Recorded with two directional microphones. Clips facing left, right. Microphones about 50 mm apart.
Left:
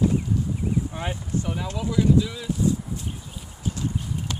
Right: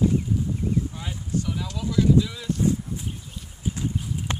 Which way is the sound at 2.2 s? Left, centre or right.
Centre.